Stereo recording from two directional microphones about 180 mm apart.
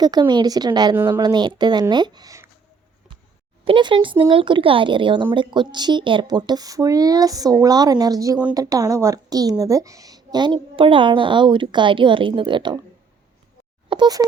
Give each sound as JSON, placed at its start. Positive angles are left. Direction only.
{"t": 0.0, "sound": "a woman's voice", "side_deg": -25}
{"t": 3.6, "sound": "a woman's voice", "side_deg": -30}
{"t": 13.9, "sound": "speech", "side_deg": -25}